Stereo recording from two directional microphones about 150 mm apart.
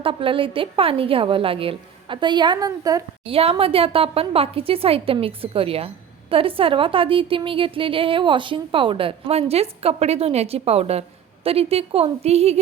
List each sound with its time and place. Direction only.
0.0 s a woman's voice: 35° right (ahead or behind)
3.2 s a woman's voice: 40° right (ahead or behind)